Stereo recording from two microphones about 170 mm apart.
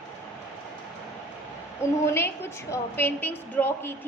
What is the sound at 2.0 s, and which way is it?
A woman's voice, 15° left (ahead or behind).